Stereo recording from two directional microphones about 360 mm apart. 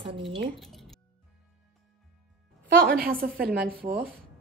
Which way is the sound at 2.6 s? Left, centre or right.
Right.